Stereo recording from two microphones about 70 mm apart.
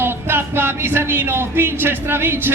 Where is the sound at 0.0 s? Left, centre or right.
Right.